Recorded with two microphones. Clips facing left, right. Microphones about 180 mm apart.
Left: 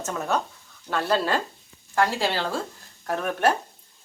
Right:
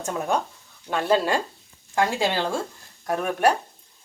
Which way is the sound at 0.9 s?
10° right (ahead or behind).